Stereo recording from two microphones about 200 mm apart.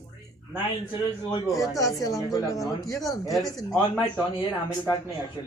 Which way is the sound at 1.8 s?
15° left (ahead or behind).